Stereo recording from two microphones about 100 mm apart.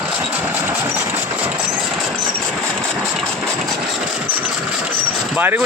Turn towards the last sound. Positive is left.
turn(degrees=-20)  # may be behind; listen again after turning